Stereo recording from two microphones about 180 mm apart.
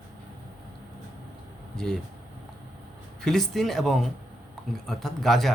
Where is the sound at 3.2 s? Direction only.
Centre (ahead or behind).